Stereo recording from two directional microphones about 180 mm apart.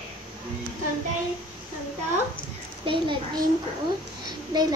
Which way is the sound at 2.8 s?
30° right (ahead or behind).